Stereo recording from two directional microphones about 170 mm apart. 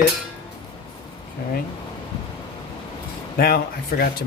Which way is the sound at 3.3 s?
60° left (ahead or behind).